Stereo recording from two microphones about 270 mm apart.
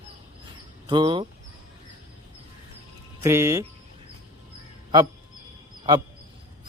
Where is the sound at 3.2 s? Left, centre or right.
Centre.